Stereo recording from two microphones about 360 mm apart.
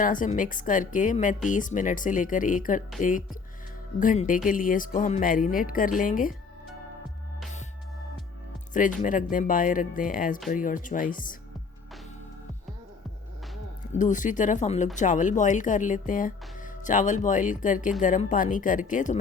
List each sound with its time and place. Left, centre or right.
0.0 s speech: left
9.0 s speech: left
13.9 s speech: left